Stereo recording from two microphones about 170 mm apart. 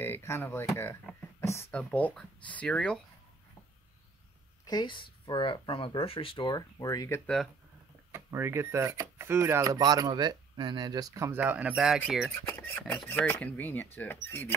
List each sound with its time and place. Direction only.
0.0 s speech: 15° left (ahead or behind)
4.6 s speech: 25° left (ahead or behind)
8.1 s speech: 15° right (ahead or behind)
12.4 s speech: 10° left (ahead or behind)